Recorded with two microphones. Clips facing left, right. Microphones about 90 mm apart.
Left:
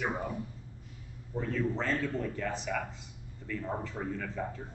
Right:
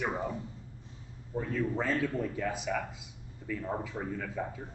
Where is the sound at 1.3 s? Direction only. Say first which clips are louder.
Even; 5° right (ahead or behind).